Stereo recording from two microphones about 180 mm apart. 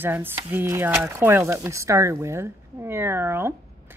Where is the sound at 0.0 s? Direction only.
10° right (ahead or behind).